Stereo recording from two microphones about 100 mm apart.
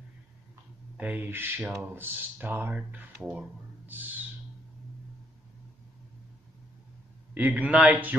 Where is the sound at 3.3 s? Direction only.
15° right (ahead or behind).